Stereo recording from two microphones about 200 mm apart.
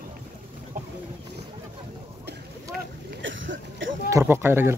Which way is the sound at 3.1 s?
70° right (ahead or behind).